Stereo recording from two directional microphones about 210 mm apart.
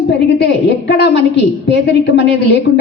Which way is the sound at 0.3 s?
55° left (ahead or behind).